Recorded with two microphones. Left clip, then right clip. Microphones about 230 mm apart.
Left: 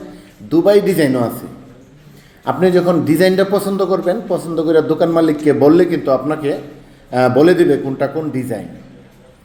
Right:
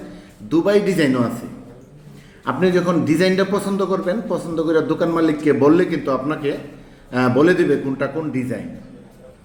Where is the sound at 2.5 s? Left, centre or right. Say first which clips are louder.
Left 5 dB; centre.